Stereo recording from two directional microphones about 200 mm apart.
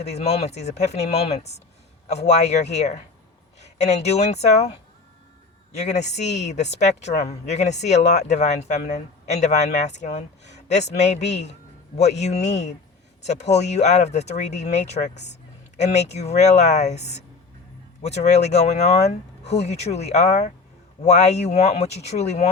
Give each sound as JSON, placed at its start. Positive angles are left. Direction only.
{"t": 0.0, "sound": "speech", "side_deg": 35}
{"t": 5.7, "sound": "speech", "side_deg": 35}
{"t": 18.0, "sound": "speech", "side_deg": 35}